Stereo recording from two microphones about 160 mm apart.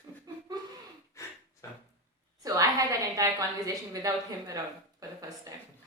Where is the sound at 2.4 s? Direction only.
20° right (ahead or behind).